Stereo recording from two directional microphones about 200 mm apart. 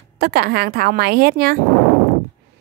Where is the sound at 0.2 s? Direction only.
50° right (ahead or behind).